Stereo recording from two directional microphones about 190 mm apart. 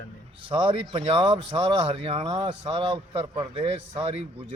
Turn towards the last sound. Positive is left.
turn(degrees=-30)  # may be behind; listen again after turning